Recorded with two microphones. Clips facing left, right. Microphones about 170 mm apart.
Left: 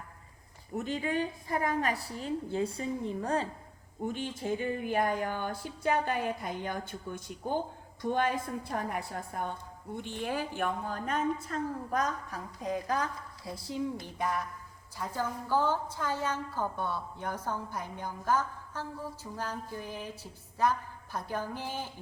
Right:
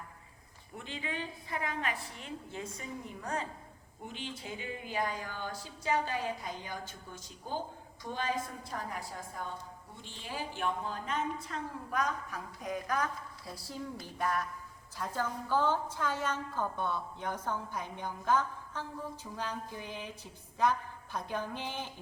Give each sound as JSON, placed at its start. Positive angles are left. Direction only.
{"t": 0.7, "sound": "a woman's voice", "side_deg": 45}
{"t": 4.0, "sound": "a woman's voice", "side_deg": 50}
{"t": 12.5, "sound": "a woman's voice", "side_deg": 30}